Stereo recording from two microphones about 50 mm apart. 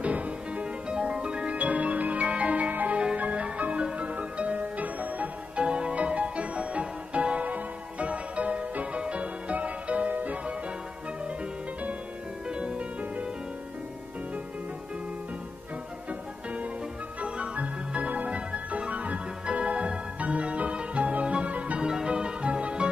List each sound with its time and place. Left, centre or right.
0.0 s music: right
5.6 s music: right
12.4 s music: right
17.2 s music: right